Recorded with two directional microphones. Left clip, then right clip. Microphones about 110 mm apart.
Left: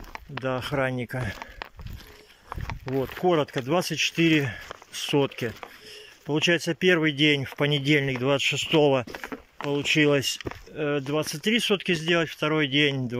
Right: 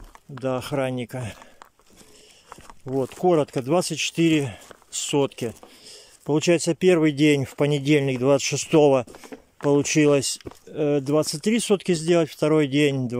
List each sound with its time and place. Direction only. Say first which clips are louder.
0.4 s speech: right 1 dB; 35° right (ahead or behind)
3.0 s speech: right 3 dB; 30° right (ahead or behind)
5.9 s speech: right 6 dB; 45° right (ahead or behind)
8.7 s speech: right 5 dB; 30° right (ahead or behind)
9.7 s speech: right 4 dB; 50° right (ahead or behind)
10.0 s speech: right 3 dB; 35° right (ahead or behind)
10.7 s speech: right 5 dB; 50° right (ahead or behind)